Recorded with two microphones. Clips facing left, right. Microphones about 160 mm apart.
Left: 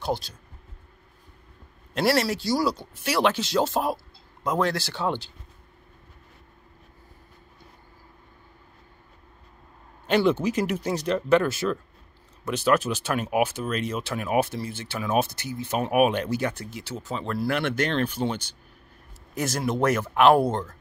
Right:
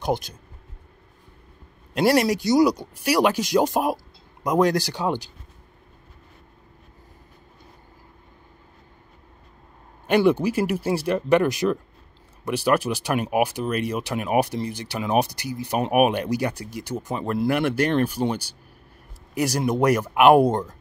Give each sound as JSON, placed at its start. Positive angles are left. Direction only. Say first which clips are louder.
{"t": 0.0, "sound": "speech", "louder": "right 3 dB", "side_deg": -20}
{"t": 2.1, "sound": "speech", "louder": "right 6 dB", "side_deg": -15}
{"t": 10.0, "sound": "speech", "louder": "right 3 dB", "side_deg": -10}